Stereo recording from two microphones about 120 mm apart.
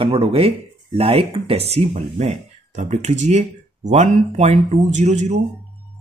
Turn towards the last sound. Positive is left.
turn(degrees=-70)  # may be behind; listen again after turning